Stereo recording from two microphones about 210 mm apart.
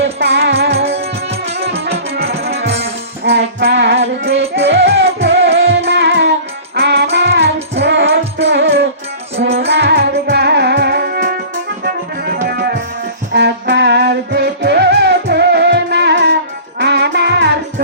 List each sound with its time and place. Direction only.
0.0 s music: 55° right (ahead or behind)
1.3 s music: 30° right (ahead or behind)
2.1 s music: 50° right (ahead or behind)